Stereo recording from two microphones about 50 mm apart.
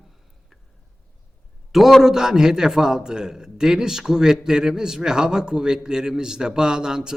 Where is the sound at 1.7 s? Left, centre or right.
Centre.